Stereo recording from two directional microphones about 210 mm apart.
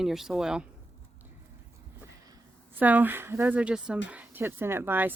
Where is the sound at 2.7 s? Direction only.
10° right (ahead or behind).